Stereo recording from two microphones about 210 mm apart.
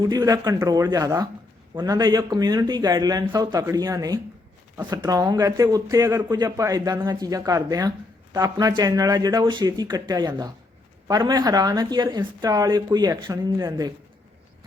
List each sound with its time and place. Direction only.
0.0 s speech: 15° right (ahead or behind)